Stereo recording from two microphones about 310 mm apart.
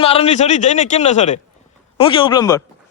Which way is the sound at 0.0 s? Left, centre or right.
Centre.